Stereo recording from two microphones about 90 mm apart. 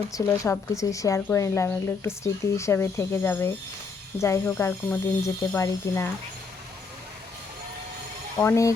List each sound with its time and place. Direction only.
0.4 s speech: 30° left (ahead or behind)
8.4 s speech: 35° left (ahead or behind)